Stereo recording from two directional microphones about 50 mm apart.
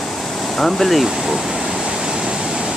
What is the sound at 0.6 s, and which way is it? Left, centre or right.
Speech, centre.